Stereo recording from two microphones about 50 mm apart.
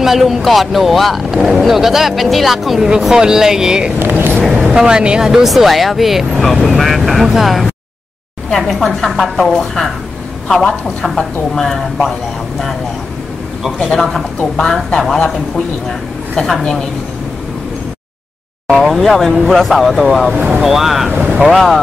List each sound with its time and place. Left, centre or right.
0.0 s speech: centre
10.5 s a woman's voice: centre
13.7 s a woman's voice: centre
18.9 s speech: centre
20.3 s speech: centre
20.6 s speech: centre
21.1 s boat: right
21.4 s speech: centre